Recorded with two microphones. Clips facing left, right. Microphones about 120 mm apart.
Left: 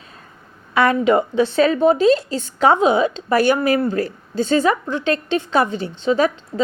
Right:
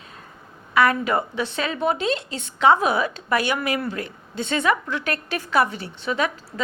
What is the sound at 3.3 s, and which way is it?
A woman's voice, 40° left (ahead or behind).